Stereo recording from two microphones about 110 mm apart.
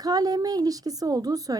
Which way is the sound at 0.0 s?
35° right (ahead or behind).